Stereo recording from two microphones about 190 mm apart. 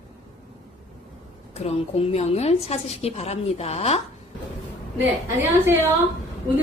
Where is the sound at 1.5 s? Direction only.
35° left (ahead or behind).